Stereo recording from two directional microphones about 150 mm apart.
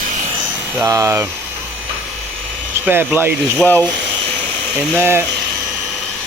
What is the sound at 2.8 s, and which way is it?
Speech, 10° right (ahead or behind).